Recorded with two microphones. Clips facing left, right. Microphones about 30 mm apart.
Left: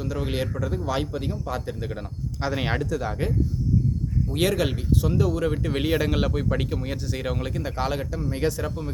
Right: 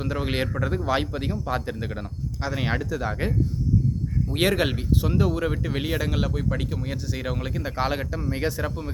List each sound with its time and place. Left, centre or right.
0.0 s a man's voice: right
2.4 s speech: centre
2.8 s a man's voice: centre
5.6 s speech: centre
7.8 s speech: centre